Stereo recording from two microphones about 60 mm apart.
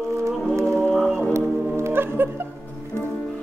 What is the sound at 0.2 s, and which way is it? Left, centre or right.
Music, right.